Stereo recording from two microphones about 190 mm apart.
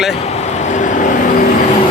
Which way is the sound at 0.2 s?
35° left (ahead or behind).